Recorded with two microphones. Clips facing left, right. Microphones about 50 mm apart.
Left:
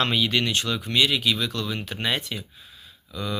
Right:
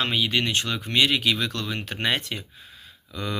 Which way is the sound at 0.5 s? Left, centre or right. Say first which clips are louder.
Even; right.